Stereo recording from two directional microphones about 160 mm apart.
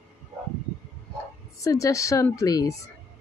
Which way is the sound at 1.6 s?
20° left (ahead or behind).